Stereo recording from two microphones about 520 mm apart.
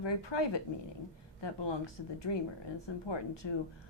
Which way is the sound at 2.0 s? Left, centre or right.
Left.